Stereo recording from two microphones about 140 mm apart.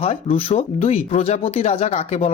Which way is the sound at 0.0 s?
45° left (ahead or behind).